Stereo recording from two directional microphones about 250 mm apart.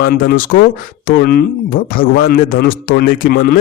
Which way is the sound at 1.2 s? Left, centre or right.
Left.